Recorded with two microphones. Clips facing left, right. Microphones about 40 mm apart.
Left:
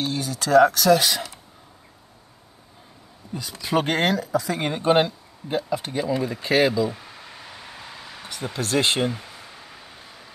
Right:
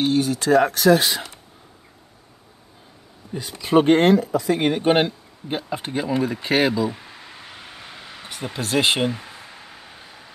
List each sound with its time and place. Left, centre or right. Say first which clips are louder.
0.0 s speech: right 7 dB; right
3.3 s speech: right 6 dB; right
8.5 s speech: right 2 dB; right
9.1 s a sound: right 2 dB; centre